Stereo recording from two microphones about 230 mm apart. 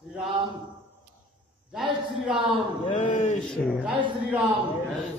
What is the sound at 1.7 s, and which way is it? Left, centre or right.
Speech, centre.